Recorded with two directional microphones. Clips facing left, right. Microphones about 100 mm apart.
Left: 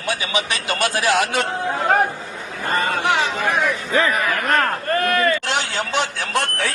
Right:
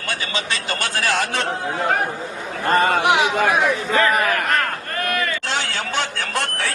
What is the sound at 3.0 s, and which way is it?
Speech, 15° right (ahead or behind).